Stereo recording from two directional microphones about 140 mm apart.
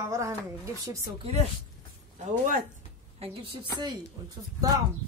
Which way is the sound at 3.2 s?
35° right (ahead or behind).